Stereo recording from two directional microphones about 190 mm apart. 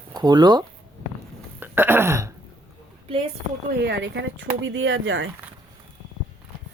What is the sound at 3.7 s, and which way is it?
Speech, 60° right (ahead or behind).